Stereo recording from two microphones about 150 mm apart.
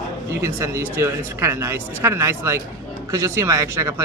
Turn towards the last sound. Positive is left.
turn(degrees=-20)  # may be behind; listen again after turning